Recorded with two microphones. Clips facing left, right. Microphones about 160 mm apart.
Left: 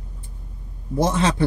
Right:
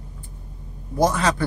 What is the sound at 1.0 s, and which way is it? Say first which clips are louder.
Speech: even; 25° left (ahead or behind).